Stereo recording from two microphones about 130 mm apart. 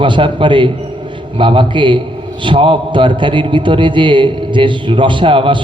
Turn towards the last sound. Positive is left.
turn(degrees=-40)  # may be behind; listen again after turning